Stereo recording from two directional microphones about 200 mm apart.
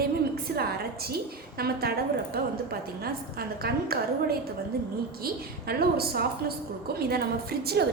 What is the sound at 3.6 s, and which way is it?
A woman's voice, 50° right (ahead or behind).